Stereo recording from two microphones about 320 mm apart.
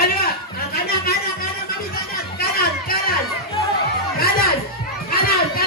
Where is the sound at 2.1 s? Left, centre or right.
Left.